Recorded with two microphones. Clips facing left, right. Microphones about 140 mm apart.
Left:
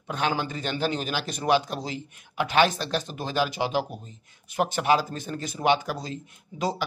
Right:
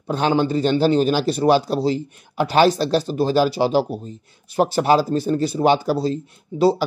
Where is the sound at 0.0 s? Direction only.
30° right (ahead or behind).